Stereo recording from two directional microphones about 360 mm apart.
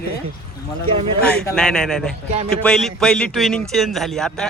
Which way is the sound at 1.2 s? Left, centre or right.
Centre.